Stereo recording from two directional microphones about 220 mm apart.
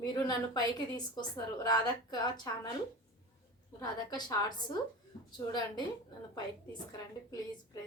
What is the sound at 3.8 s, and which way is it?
A woman's voice, 15° left (ahead or behind).